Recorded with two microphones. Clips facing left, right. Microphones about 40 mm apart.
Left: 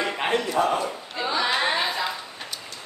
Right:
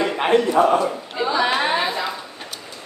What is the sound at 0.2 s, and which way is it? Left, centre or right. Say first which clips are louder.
Speech: right 8 dB; right.